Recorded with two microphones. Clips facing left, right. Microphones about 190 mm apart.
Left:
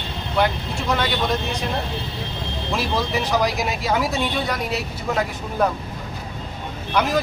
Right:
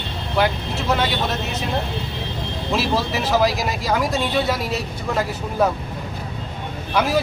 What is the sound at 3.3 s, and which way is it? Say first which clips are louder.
Speech: right 4 dB; centre (ahead or behind).